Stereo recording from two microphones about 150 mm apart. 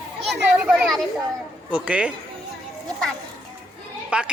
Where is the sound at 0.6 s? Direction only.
5° right (ahead or behind).